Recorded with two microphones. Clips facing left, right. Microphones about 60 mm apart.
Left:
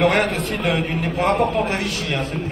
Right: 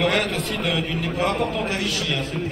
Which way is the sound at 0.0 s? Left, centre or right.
Left.